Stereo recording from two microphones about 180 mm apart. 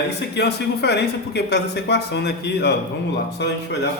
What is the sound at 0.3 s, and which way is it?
A man's voice, 70° left (ahead or behind).